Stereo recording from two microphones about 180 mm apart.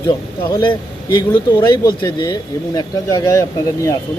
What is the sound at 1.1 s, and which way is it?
A man's voice, 25° left (ahead or behind).